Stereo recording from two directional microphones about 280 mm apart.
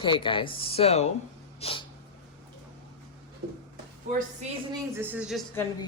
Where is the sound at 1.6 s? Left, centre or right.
Centre.